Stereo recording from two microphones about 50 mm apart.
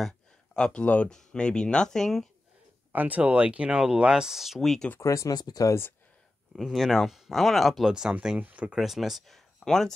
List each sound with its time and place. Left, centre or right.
0.6 s speech: centre
2.9 s speech: right; by 4.6 s centre
4.6 s speech: centre
5.0 s speech: left
6.5 s speech: centre
7.8 s speech: centre
8.4 s speech: right
8.7 s speech: centre
9.7 s speech: centre